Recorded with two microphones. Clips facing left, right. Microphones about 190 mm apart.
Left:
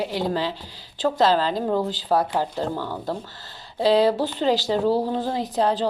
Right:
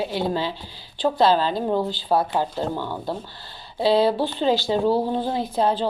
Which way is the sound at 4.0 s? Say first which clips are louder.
Even; 40° left (ahead or behind).